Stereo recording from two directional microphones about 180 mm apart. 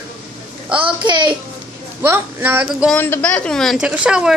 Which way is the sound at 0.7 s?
25° right (ahead or behind).